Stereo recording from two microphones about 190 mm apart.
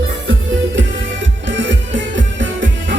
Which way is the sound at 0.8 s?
75° right (ahead or behind).